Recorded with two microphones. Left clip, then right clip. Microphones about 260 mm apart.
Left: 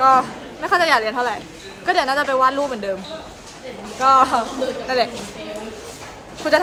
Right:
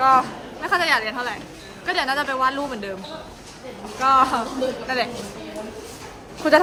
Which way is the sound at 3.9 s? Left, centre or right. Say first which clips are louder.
Left 3 dB; centre.